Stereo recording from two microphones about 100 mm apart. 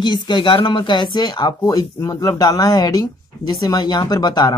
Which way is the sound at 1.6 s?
35° left (ahead or behind).